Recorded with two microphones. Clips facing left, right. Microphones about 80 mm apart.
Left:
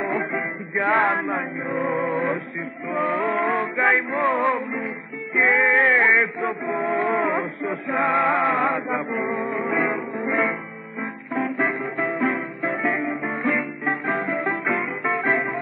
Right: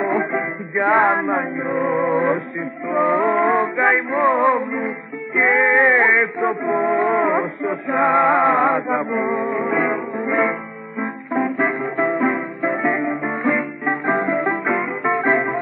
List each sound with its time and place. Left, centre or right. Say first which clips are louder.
0.0 s music: right 5 dB; centre
4.7 s music: right 5 dB; right
5.4 s male singing: right 3 dB; centre
6.7 s music: right 4 dB; centre
9.2 s music: right 4 dB; right
9.5 s music: right 4 dB; centre
15.2 s music: right 4 dB; right